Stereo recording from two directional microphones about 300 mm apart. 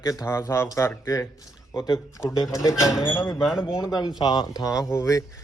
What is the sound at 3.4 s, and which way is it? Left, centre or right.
Speech, centre.